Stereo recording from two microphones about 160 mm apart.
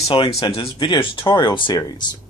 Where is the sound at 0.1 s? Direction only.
35° left (ahead or behind).